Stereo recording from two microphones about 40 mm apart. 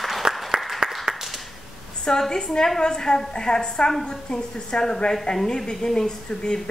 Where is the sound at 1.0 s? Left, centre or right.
Centre.